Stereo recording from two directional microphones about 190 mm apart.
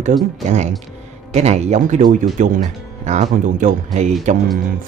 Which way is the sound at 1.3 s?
35° right (ahead or behind).